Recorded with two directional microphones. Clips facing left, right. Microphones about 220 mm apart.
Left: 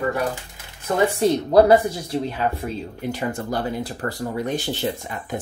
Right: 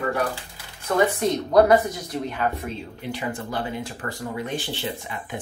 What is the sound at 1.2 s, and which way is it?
Speech, 30° left (ahead or behind).